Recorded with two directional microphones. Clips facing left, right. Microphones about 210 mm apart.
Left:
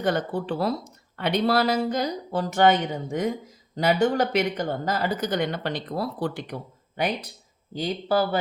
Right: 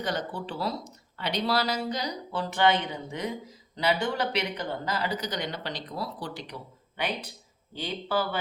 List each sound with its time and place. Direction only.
0.0 s speech: 55° left (ahead or behind)